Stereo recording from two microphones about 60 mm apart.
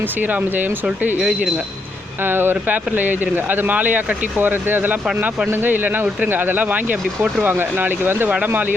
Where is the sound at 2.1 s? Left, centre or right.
Right.